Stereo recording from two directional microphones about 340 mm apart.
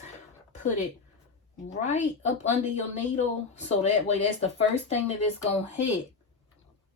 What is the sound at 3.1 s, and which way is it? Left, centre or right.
Speech, centre.